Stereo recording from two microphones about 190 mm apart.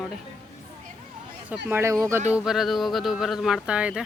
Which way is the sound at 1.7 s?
15° right (ahead or behind).